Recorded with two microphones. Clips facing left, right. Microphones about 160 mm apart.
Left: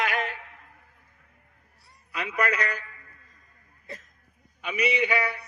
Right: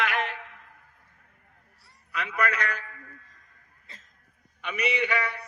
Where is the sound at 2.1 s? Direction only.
35° left (ahead or behind).